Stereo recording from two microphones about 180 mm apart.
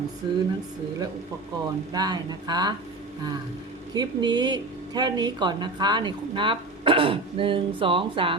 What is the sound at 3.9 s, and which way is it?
Speech, 25° right (ahead or behind).